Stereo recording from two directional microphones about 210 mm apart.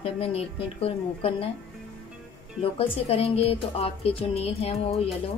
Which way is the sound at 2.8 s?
25° left (ahead or behind).